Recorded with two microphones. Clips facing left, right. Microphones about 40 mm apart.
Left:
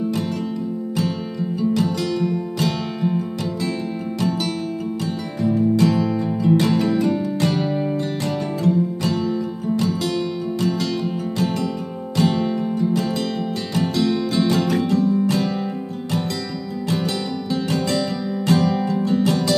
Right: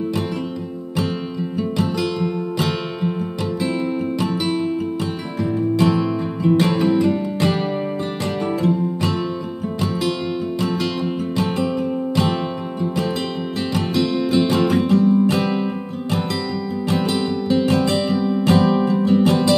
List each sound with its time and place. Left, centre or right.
1.6 s music: right
4.2 s music: right
5.8 s music: right
8.6 s music: right
10.6 s music: right
17.5 s music: right